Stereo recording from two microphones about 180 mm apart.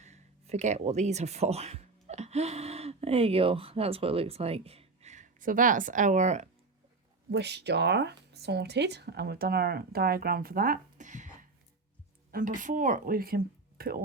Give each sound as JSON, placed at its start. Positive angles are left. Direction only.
{"t": 0.0, "sound": "speech", "side_deg": -40}
{"t": 7.3, "sound": "speech", "side_deg": -70}